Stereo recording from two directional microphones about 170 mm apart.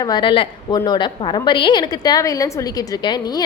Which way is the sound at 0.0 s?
25° left (ahead or behind).